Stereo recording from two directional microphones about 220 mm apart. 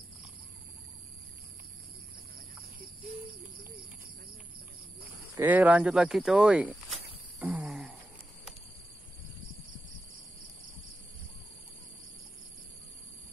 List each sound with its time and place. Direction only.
5.4 s speech: 5° right (ahead or behind)
7.4 s wail: centre (ahead or behind)